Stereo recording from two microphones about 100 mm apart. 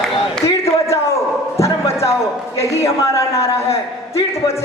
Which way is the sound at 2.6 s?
30° left (ahead or behind).